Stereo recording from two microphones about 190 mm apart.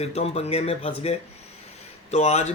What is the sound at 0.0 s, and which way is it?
Speech, 35° left (ahead or behind).